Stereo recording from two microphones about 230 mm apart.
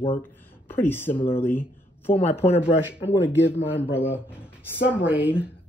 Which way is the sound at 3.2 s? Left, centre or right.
Left.